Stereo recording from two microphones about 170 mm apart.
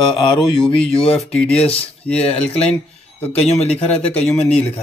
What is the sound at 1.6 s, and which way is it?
Speech, 35° left (ahead or behind).